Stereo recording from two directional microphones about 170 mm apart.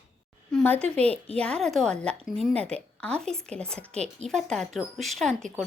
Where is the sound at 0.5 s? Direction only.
10° left (ahead or behind).